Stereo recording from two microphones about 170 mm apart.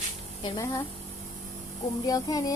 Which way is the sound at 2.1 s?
20° left (ahead or behind).